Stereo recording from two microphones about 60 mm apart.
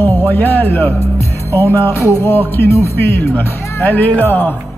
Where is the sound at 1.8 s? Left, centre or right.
Left.